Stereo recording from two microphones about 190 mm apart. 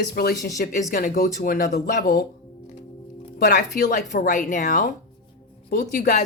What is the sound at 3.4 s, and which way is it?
Speech, 50° left (ahead or behind).